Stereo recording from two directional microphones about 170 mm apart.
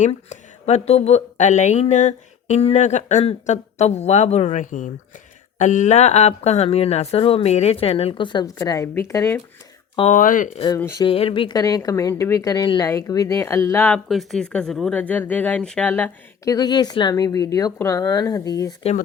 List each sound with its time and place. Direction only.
0.0 s speech: 40° left (ahead or behind); by 9.4 s 15° left (ahead or behind)
10.1 s speech: 50° left (ahead or behind)
10.8 s speech: 15° left (ahead or behind)
11.0 s speech: 30° left (ahead or behind); by 14.0 s 10° left (ahead or behind)
14.1 s speech: centre (ahead or behind); by 18.7 s 20° left (ahead or behind)